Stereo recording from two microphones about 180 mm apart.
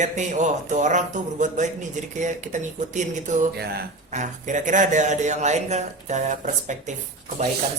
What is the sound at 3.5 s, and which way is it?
Speech, 60° right (ahead or behind).